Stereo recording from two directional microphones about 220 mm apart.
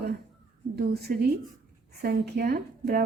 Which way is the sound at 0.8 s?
45° right (ahead or behind).